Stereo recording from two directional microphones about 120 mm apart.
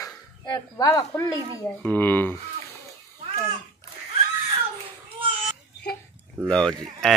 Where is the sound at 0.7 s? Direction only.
30° left (ahead or behind).